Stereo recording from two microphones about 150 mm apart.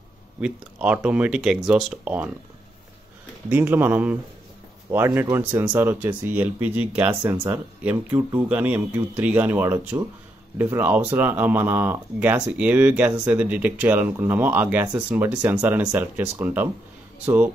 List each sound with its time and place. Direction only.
0.4 s speech: 5° right (ahead or behind)
3.4 s speech: 15° right (ahead or behind)